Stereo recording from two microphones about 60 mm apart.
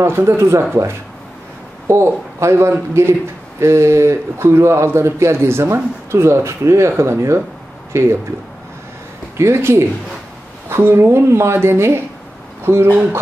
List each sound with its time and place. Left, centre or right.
0.0 s speech: right
1.9 s speech: right
9.4 s speech: right
12.9 s speech: right